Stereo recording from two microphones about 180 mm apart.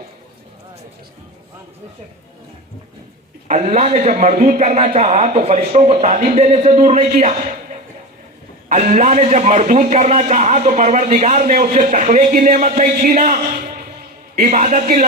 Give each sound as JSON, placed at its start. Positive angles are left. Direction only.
{"t": 3.5, "sound": "speech", "side_deg": -40}
{"t": 8.7, "sound": "speech", "side_deg": -40}
{"t": 14.4, "sound": "speech", "side_deg": -40}